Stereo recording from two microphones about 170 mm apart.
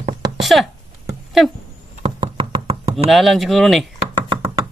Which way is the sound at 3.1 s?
Centre (ahead or behind).